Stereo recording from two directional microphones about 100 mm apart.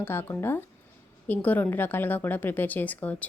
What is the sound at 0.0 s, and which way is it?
A woman's voice, 25° left (ahead or behind).